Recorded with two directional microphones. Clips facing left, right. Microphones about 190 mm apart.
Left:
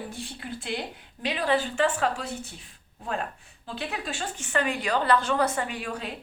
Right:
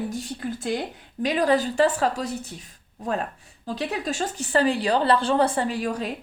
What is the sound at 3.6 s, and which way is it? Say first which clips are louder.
Speech: right 6 dB; 40° right (ahead or behind).